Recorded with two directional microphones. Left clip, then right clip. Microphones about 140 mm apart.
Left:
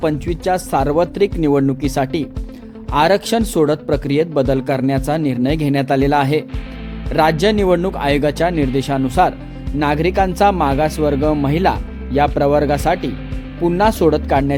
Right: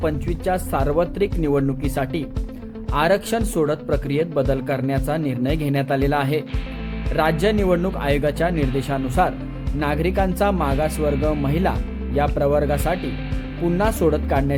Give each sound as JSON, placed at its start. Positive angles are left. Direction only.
{"t": 0.0, "sound": "a man's voice", "side_deg": 45}